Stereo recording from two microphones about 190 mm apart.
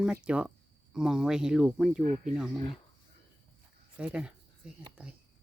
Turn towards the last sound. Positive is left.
turn(degrees=-5)  # may be behind; listen again after turning